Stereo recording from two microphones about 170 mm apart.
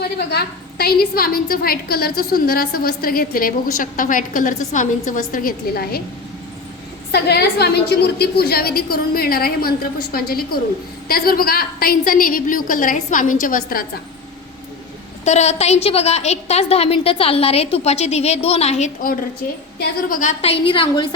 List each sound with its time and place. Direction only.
0.0 s a woman's voice: 70° left (ahead or behind)
7.1 s a woman's voice: 75° left (ahead or behind); by 13.8 s 55° left (ahead or behind)
15.2 s a woman's voice: 40° left (ahead or behind)
20.1 s a woman's voice: 50° left (ahead or behind)
20.4 s a woman's voice: 35° left (ahead or behind)